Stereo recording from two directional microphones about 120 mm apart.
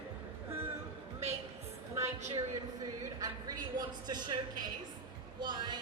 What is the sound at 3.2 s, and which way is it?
A man's voice, 30° right (ahead or behind).